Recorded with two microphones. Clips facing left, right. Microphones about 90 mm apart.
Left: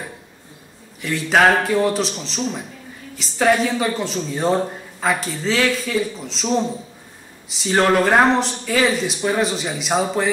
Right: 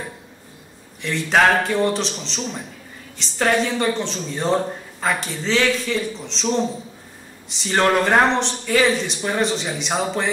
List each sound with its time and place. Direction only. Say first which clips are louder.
1.0 s speech: left 1 dB; centre (ahead or behind)